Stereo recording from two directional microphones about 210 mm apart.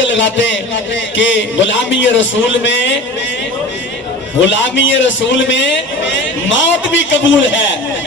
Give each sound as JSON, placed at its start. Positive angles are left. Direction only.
{"t": 0.0, "sound": "a man's voice", "side_deg": 60}
{"t": 4.4, "sound": "a man's voice", "side_deg": 60}